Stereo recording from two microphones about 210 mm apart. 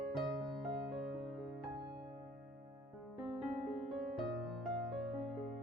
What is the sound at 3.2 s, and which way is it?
Music, centre (ahead or behind).